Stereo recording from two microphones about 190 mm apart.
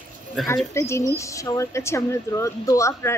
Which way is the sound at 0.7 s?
15° left (ahead or behind).